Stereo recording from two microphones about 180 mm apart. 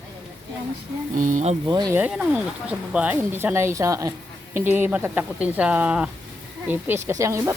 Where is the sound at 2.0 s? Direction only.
5° right (ahead or behind).